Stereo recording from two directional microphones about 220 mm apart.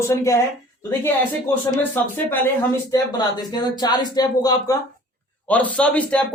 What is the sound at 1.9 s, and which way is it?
Speech, 10° left (ahead or behind).